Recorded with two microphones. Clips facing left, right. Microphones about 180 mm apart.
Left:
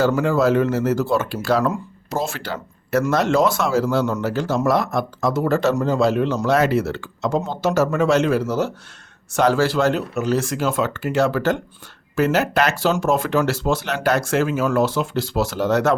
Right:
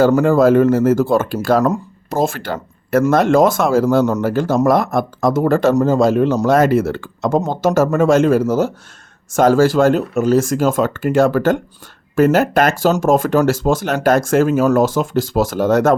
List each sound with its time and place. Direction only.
0.0 s speech: 45° right (ahead or behind)